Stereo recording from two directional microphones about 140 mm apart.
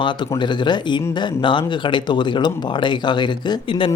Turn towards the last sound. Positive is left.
turn(degrees=35)  # may be behind; listen again after turning